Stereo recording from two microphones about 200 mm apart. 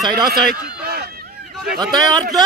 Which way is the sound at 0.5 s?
50° right (ahead or behind).